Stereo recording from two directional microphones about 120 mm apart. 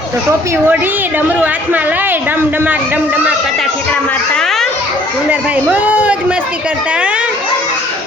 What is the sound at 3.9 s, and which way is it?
Speech, 5° left (ahead or behind).